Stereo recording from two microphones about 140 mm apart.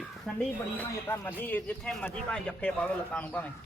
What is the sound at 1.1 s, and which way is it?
Speech, 15° left (ahead or behind).